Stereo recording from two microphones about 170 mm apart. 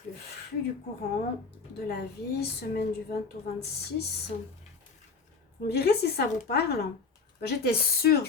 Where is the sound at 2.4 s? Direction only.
70° left (ahead or behind).